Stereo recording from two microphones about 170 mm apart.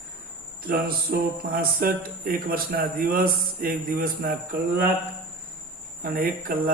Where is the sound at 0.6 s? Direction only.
60° right (ahead or behind).